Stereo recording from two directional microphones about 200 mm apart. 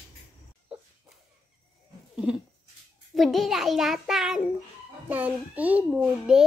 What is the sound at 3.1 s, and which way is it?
A child's voice, centre (ahead or behind).